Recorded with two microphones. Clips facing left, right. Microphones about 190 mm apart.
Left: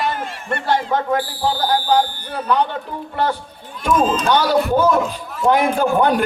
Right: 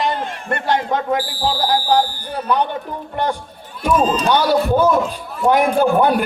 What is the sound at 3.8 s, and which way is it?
Speech, 10° right (ahead or behind).